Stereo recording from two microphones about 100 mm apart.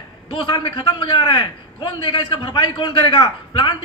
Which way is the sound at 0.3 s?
60° left (ahead or behind).